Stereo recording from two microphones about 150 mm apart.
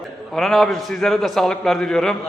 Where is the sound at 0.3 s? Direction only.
Centre (ahead or behind).